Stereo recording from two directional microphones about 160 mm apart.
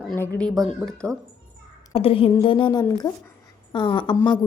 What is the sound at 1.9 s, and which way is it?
A woman's voice, 35° left (ahead or behind).